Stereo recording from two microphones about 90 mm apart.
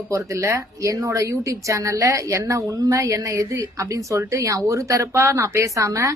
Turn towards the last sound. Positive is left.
turn(degrees=-35)  # may be behind; listen again after turning